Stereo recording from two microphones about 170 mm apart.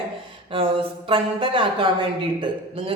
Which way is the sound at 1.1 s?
30° right (ahead or behind).